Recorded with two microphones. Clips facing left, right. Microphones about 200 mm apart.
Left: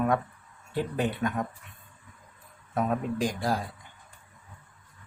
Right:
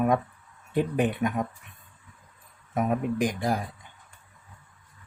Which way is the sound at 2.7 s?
15° right (ahead or behind).